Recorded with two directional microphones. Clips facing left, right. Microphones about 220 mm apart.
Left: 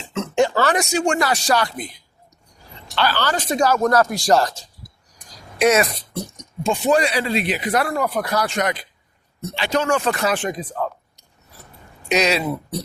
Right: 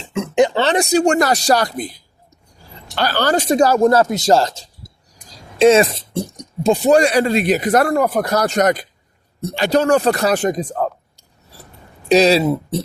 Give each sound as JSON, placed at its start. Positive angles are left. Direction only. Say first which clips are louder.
{"t": 0.1, "sound": "a sound", "louder": "right 4 dB", "side_deg": -15}
{"t": 0.9, "sound": "speech", "louder": "right 6 dB", "side_deg": -40}
{"t": 12.0, "sound": "speech", "louder": "right 7 dB", "side_deg": -30}